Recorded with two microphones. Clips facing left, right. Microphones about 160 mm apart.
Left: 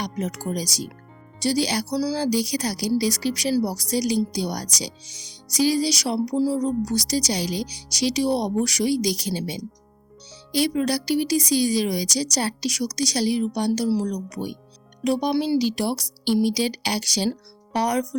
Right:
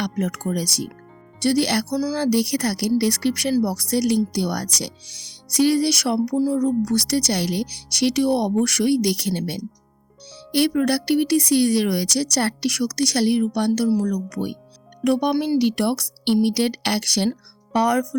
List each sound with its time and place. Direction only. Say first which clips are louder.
0.0 s speech: right 4 dB; 55° right (ahead or behind)